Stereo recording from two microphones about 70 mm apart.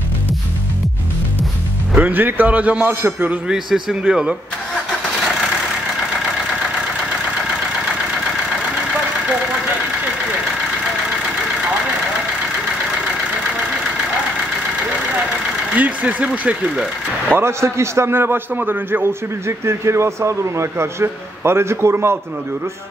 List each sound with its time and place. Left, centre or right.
2.0 s a man's voice: right
3.4 s a man's voice: centre
15.7 s vehicle: right
16.4 s a man's voice: centre
17.3 s a man's voice: right